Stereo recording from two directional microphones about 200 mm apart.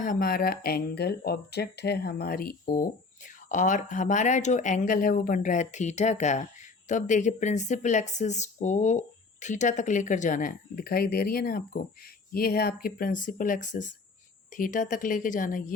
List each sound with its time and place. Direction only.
0.0 s speech: 45° left (ahead or behind)